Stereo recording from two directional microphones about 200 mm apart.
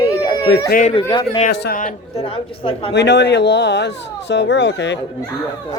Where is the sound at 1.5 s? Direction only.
55° left (ahead or behind).